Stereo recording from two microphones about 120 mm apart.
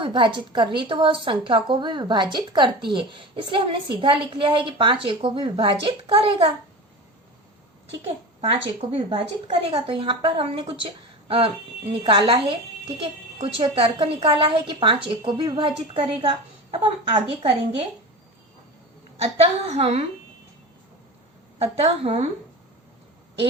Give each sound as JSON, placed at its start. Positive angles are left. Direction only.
{"t": 0.0, "sound": "a woman's voice", "side_deg": -40}
{"t": 8.4, "sound": "a woman's voice", "side_deg": -50}
{"t": 19.2, "sound": "a woman's voice", "side_deg": -60}
{"t": 21.6, "sound": "a woman's voice", "side_deg": -55}